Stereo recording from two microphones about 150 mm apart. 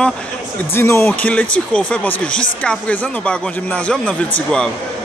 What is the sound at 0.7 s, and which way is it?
Speech, 15° left (ahead or behind).